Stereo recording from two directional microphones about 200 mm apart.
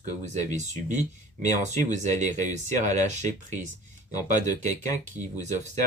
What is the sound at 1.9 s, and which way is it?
Speech, 35° right (ahead or behind).